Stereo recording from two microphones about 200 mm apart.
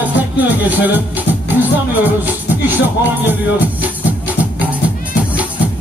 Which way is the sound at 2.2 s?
10° right (ahead or behind).